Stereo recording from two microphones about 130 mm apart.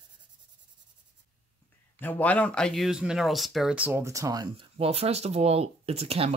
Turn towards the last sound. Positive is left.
turn(degrees=-55)  # may be behind; listen again after turning